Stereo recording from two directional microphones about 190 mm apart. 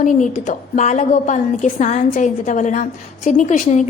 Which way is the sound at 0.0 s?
40° left (ahead or behind).